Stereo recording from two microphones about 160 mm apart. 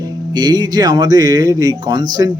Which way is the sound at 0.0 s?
25° right (ahead or behind).